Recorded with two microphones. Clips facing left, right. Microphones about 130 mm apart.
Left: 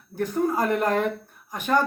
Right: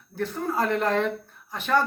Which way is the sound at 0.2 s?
15° left (ahead or behind).